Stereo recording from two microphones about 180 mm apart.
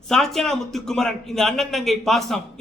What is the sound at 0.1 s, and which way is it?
Speech, centre (ahead or behind).